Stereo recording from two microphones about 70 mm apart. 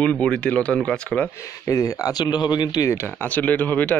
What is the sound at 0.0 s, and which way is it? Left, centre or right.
Speech, centre.